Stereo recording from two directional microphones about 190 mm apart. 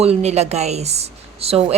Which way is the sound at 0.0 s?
35° right (ahead or behind).